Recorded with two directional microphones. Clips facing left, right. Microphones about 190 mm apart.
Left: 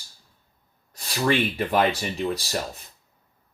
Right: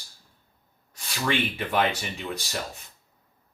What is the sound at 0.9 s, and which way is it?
Speech, 35° left (ahead or behind).